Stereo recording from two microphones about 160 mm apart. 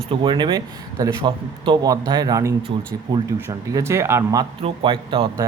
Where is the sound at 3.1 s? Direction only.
25° right (ahead or behind).